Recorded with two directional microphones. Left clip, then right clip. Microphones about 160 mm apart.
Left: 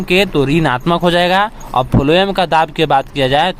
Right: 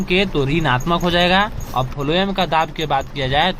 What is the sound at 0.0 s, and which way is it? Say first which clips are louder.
Speech: left 5 dB; 30° left (ahead or behind).